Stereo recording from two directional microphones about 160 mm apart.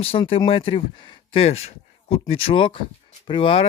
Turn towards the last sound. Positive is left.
turn(degrees=35)  # may be behind; listen again after turning